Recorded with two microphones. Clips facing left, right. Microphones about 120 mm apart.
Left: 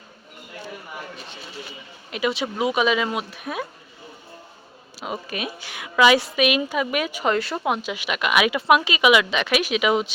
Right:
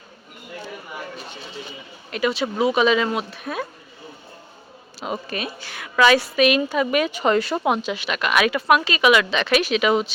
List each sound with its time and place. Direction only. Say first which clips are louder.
2.0 s speech: right 2 dB; 15° left (ahead or behind)
4.9 s speech: right 2 dB; 5° left (ahead or behind)